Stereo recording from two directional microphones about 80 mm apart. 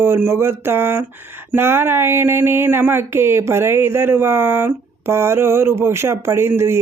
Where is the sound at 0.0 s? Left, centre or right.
Right.